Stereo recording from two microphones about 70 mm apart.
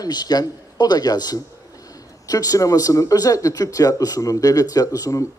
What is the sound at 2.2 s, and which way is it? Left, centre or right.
A man's voice, left.